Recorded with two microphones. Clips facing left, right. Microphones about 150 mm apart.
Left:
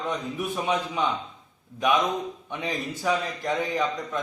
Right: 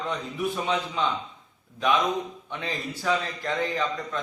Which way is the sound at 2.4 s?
15° left (ahead or behind).